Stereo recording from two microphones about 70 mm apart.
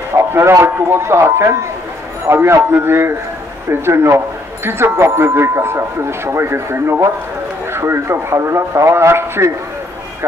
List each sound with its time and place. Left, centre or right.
0.3 s speech: right